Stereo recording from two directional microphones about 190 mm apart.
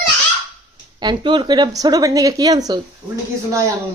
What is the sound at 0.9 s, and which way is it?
Speech, 25° right (ahead or behind).